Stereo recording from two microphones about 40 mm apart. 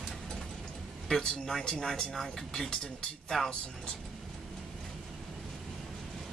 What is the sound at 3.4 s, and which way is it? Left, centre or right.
Speech, left.